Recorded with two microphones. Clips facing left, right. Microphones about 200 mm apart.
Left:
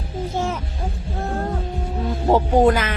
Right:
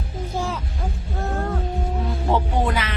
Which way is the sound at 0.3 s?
20° left (ahead or behind).